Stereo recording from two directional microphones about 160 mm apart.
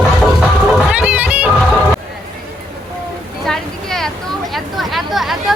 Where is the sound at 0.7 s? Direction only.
5° right (ahead or behind).